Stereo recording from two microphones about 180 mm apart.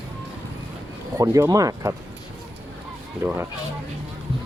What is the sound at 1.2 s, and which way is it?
Speech, 20° right (ahead or behind).